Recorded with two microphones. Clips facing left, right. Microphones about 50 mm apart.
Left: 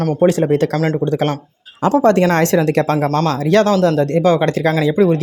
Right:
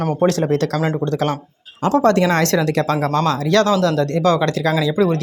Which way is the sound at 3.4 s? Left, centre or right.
Left.